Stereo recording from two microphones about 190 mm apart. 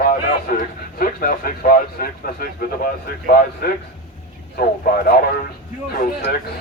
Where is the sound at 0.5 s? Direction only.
45° left (ahead or behind).